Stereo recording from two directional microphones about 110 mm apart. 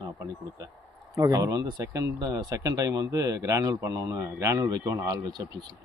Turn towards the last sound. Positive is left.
turn(degrees=-30)  # may be behind; listen again after turning